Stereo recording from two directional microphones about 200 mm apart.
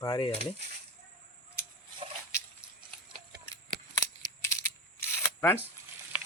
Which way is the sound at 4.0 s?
15° left (ahead or behind).